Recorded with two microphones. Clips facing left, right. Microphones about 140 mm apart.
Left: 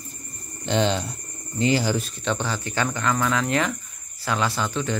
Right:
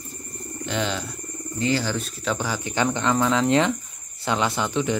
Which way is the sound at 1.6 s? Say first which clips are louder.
Left 2 dB; 15° left (ahead or behind).